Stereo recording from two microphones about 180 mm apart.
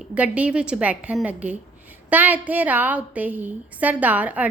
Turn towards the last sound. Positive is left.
turn(degrees=-10)  # may be behind; listen again after turning